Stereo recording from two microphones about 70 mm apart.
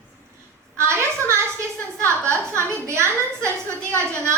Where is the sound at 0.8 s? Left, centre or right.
Right.